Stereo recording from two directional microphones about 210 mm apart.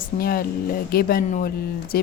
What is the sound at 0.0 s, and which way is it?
Speech, 45° left (ahead or behind).